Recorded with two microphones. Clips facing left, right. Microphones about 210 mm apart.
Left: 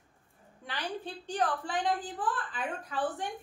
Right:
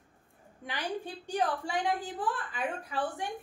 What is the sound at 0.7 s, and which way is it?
A woman's voice, 10° right (ahead or behind).